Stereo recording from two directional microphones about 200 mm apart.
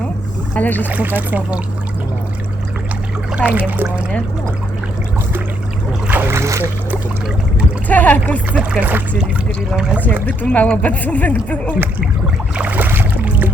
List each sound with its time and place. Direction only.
0.5 s speech: 10° left (ahead or behind)
0.9 s speech: 10° right (ahead or behind)
3.3 s speech: 5° right (ahead or behind)
6.1 s boat: 10° right (ahead or behind)
7.9 s speech: 10° left (ahead or behind)
8.7 s speech: 10° right (ahead or behind)
10.2 s speech: 5° left (ahead or behind)
12.5 s a sound: 10° right (ahead or behind)